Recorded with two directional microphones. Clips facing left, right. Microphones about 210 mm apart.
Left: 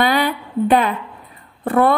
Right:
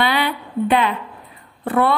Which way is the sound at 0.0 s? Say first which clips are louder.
Left 3 dB; 45° left (ahead or behind).